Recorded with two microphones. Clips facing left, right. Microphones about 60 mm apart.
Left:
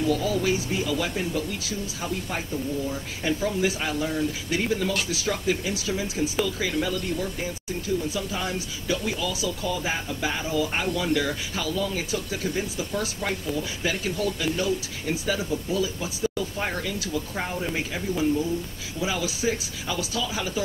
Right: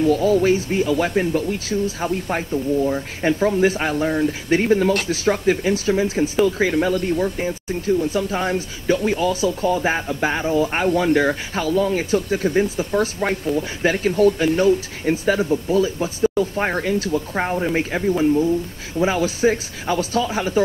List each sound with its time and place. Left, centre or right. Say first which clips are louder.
0.0 s speech: right 8 dB; right